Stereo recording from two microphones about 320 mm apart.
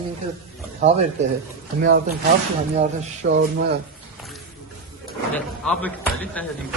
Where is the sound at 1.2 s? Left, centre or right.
Right.